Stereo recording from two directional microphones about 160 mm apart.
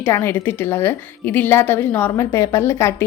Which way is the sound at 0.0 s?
15° left (ahead or behind).